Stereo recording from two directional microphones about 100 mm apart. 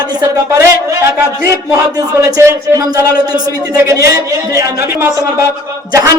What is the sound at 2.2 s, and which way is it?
A woman's voice, 30° right (ahead or behind).